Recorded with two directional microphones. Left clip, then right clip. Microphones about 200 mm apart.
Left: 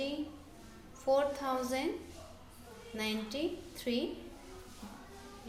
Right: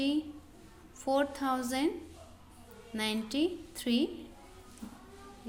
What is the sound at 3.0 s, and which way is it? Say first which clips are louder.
A woman's voice: right 4 dB; 45° right (ahead or behind).